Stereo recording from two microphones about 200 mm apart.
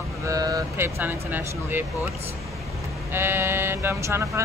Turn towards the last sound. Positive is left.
turn(degrees=-15)  # may be behind; listen again after turning